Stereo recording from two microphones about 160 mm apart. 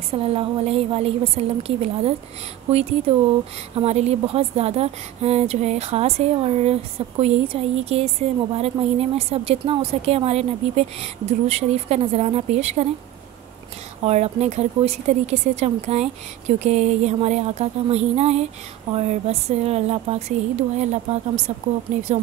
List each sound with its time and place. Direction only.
0.1 s a woman's voice: 35° right (ahead or behind)
14.0 s a woman's voice: 40° right (ahead or behind)